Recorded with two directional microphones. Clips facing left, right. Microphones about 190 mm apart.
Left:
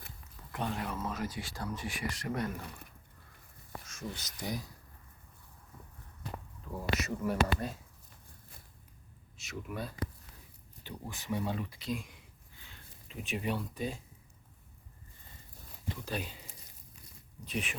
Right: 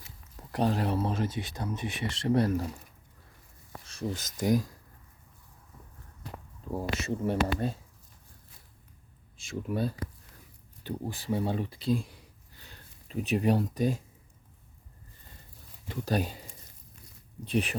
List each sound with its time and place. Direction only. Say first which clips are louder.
0.5 s speech: right 9 dB; 35° right (ahead or behind)
3.8 s a sound: right 9 dB; 35° right (ahead or behind)
4.2 s speech: right 10 dB; 50° right (ahead or behind)
6.9 s speech: right 1 dB; 30° right (ahead or behind)
9.4 s speech: right 9 dB; 30° right (ahead or behind)
16.0 s speech: right 10 dB; 40° right (ahead or behind)
17.4 s speech: right 8 dB; 35° right (ahead or behind)